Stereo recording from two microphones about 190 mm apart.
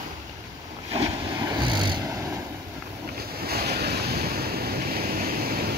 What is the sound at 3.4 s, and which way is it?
Waves, 55° right (ahead or behind).